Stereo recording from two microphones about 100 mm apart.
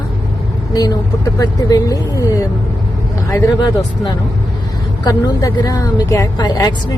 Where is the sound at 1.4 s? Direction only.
35° left (ahead or behind).